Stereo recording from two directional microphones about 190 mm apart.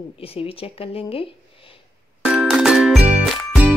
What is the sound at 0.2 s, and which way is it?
Speech, 30° left (ahead or behind).